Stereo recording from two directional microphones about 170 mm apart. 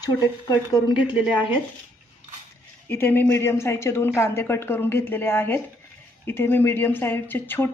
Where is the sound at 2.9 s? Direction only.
10° left (ahead or behind).